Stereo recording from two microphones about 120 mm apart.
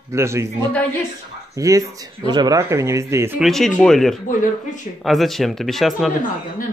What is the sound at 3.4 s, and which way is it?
Speech, centre (ahead or behind).